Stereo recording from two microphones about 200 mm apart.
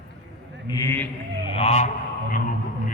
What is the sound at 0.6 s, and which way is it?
Speech, 20° left (ahead or behind).